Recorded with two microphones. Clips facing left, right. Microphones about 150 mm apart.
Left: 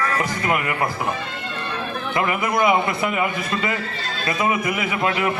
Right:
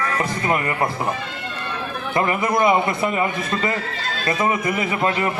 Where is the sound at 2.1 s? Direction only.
30° right (ahead or behind).